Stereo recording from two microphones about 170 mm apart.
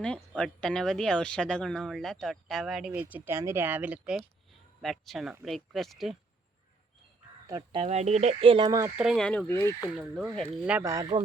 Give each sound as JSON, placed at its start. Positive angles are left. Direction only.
{"t": 0.0, "sound": "speech", "side_deg": 5}
{"t": 7.4, "sound": "speech", "side_deg": -20}
{"t": 7.8, "sound": "speech", "side_deg": -40}
{"t": 9.0, "sound": "speech", "side_deg": 0}
{"t": 10.2, "sound": "speech", "side_deg": 0}